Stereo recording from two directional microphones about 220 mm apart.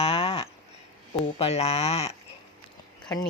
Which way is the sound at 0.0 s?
25° left (ahead or behind).